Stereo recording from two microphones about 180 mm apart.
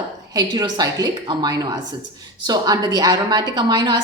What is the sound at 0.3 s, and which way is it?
Speech, 25° right (ahead or behind).